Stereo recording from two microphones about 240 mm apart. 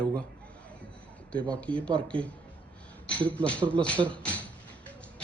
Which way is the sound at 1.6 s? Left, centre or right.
Centre.